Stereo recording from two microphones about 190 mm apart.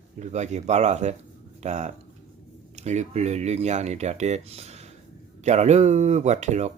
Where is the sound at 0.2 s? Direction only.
35° right (ahead or behind).